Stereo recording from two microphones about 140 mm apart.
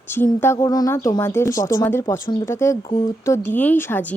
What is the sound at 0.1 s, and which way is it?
A woman's voice, 15° left (ahead or behind).